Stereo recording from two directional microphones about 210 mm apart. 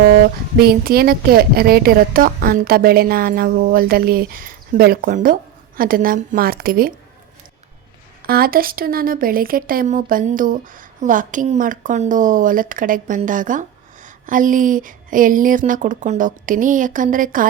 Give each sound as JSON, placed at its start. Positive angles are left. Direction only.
{"t": 0.0, "sound": "a woman's voice", "side_deg": -45}
{"t": 8.2, "sound": "speech", "side_deg": -45}